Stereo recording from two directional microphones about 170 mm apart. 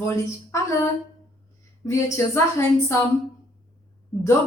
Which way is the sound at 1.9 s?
15° left (ahead or behind).